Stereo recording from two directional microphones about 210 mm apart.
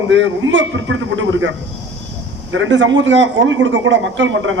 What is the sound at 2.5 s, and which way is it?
A man's voice, 65° right (ahead or behind).